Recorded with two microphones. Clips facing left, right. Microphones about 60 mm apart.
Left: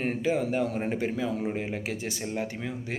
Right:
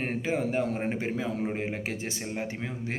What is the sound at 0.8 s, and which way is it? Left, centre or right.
Speech, right.